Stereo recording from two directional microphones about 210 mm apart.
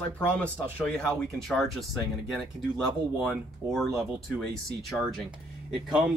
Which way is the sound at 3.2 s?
Centre (ahead or behind).